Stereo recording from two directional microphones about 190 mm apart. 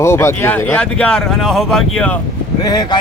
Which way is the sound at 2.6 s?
20° left (ahead or behind).